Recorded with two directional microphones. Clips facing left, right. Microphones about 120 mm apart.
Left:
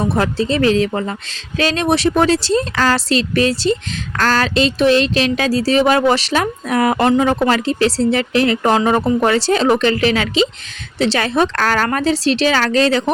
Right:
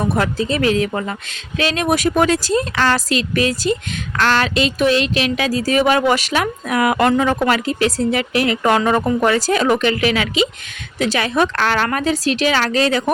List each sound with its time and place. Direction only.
0.2 s speech: 30° left (ahead or behind)
11.5 s speech: 40° left (ahead or behind)